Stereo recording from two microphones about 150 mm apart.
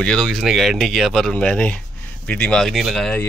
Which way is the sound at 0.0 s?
5° left (ahead or behind).